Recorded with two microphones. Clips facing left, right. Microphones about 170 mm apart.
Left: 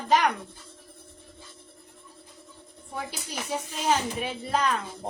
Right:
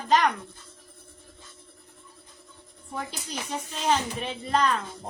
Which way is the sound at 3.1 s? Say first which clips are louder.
Left 1 dB; 10° left (ahead or behind).